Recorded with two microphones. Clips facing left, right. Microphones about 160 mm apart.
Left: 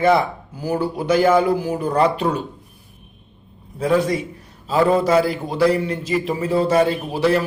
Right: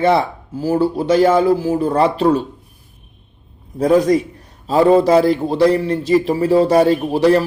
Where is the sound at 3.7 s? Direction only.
40° right (ahead or behind).